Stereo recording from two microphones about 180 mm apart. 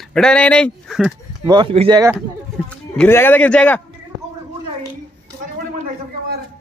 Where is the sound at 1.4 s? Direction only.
25° right (ahead or behind).